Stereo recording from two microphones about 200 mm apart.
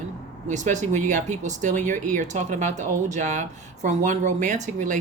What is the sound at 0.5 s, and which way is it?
Speech, 40° right (ahead or behind).